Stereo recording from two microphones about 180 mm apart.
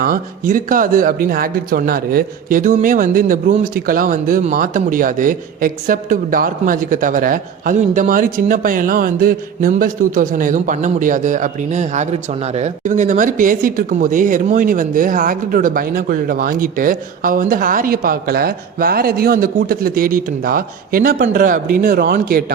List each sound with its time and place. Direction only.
0.0 s speech: 50° right (ahead or behind)